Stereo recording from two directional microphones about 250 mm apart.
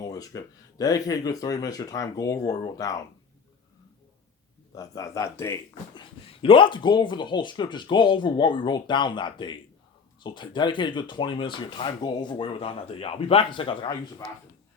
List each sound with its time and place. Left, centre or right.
0.0 s speech: centre
4.7 s speech: centre